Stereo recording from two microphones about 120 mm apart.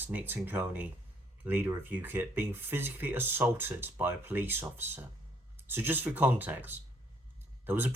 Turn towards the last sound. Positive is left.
turn(degrees=-15)  # may be behind; listen again after turning